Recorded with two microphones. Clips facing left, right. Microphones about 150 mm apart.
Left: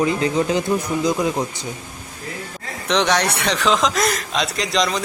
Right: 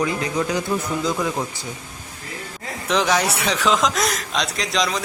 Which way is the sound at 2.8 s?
Centre (ahead or behind).